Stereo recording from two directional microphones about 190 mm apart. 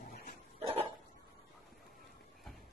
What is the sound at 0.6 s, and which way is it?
Dog, 30° right (ahead or behind).